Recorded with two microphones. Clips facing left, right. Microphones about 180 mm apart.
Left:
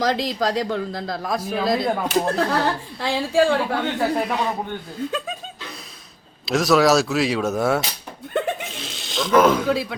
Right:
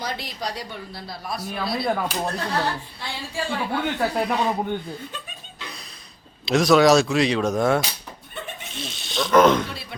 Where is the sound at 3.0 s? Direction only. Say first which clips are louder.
Left 13 dB; 90° left.